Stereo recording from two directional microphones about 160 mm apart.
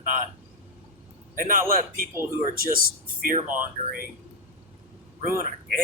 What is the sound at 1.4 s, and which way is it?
Speech, 55° right (ahead or behind).